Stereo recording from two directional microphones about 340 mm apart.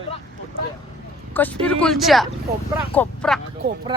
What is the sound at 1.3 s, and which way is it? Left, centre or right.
Speech, centre.